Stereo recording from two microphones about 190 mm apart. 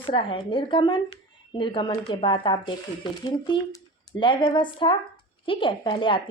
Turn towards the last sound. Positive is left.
turn(degrees=25)  # may be behind; listen again after turning